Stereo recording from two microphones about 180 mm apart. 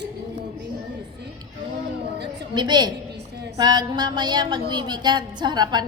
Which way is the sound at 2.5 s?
25° right (ahead or behind).